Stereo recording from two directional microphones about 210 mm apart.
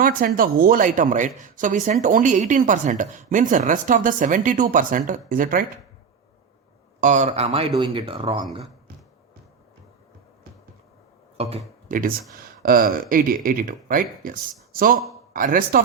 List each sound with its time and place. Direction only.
0.0 s speech: 45° right (ahead or behind)
7.0 s speech: 35° right (ahead or behind)
11.3 s speech: 30° right (ahead or behind)
11.9 s speech: 40° right (ahead or behind)